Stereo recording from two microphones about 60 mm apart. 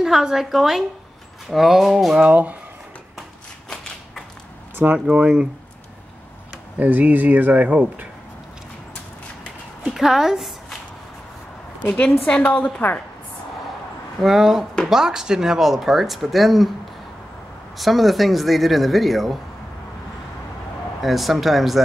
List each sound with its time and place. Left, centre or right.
0.0 s speech: centre
2.2 s speech: right
5.0 s speech: centre
6.8 s speech: right
9.9 s a woman's voice: centre
12.3 s a woman's voice: left
14.2 s speech: centre
17.7 s speech: centre
21.0 s speech: centre